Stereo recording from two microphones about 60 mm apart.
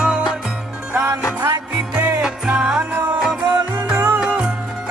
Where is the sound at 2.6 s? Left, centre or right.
Centre.